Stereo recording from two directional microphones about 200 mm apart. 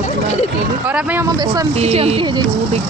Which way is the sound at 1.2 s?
15° right (ahead or behind).